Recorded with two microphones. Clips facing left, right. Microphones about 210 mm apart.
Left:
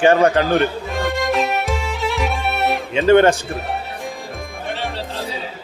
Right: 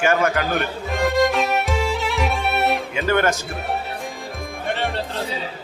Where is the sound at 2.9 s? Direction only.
25° left (ahead or behind).